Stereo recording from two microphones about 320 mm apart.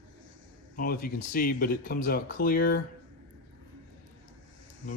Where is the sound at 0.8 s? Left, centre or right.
Left.